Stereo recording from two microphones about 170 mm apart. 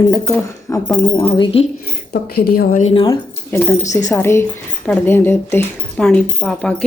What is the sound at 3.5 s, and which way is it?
Speech, 10° left (ahead or behind).